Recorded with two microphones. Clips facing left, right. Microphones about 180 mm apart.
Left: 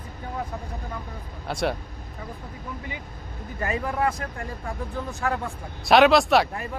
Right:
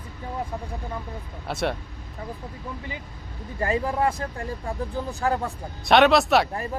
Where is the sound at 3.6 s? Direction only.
30° right (ahead or behind).